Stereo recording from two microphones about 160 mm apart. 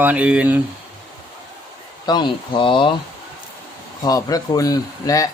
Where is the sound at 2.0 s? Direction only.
30° left (ahead or behind).